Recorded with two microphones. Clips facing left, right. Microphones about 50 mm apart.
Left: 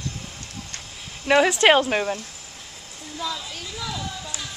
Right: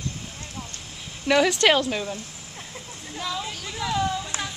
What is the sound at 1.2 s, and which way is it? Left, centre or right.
Speech, centre.